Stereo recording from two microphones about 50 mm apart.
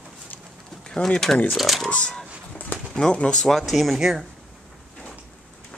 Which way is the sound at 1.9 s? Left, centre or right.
Centre.